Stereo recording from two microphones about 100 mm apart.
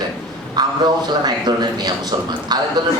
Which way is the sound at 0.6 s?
45° right (ahead or behind).